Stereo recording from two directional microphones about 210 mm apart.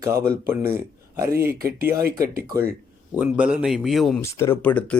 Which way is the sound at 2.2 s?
45° right (ahead or behind).